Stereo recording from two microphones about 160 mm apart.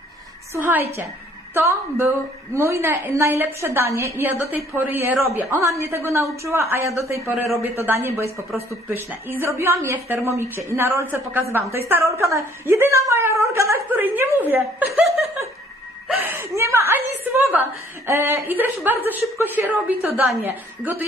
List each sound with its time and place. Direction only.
0.6 s a woman's voice: 10° right (ahead or behind)
16.1 s a sound: 10° right (ahead or behind)
19.3 s a woman's voice: 10° right (ahead or behind)